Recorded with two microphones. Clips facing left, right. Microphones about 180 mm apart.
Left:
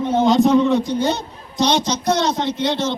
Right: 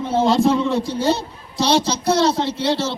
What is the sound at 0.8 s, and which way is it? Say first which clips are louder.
Speech: left 3 dB; 30° right (ahead or behind).